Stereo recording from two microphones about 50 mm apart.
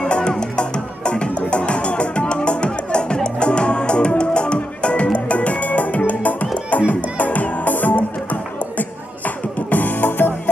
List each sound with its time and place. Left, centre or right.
0.0 s music: centre; by 10.5 s left